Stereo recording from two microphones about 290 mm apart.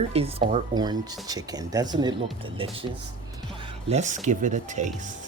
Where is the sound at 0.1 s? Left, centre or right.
Right.